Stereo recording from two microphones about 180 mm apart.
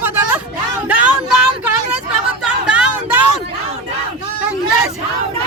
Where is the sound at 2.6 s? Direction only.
5° right (ahead or behind).